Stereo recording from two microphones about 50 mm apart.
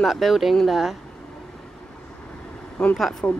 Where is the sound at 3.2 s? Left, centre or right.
Left.